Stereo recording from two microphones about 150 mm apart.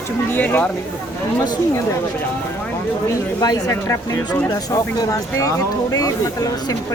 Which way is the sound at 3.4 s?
20° left (ahead or behind).